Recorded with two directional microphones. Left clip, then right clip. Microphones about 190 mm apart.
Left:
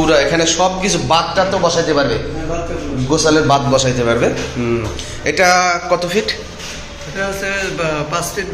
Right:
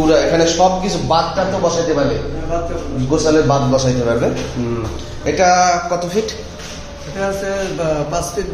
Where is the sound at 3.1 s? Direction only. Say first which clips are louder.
Left 1 dB; 20° left (ahead or behind).